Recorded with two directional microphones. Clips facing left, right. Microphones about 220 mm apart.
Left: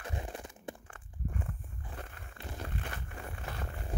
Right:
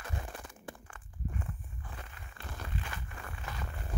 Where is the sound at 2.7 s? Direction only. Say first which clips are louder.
Left 1 dB; 50° left (ahead or behind).